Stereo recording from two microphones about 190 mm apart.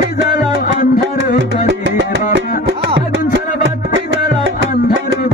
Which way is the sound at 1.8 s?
80° right.